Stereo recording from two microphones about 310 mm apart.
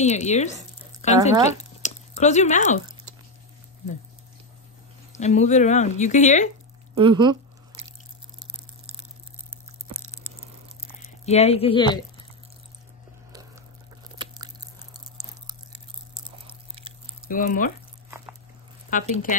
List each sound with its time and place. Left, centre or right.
0.0 s speech: left
1.3 s speech: centre
1.6 s a sound: left
5.1 s speech: left
7.0 s a sound: centre
11.2 s speech: centre
14.1 s biting: centre
15.2 s chewing: centre
16.3 s biting: centre
17.3 s speech: left
18.9 s speech: left